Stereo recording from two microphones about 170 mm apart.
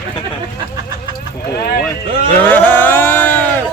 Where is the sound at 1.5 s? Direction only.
65° left (ahead or behind).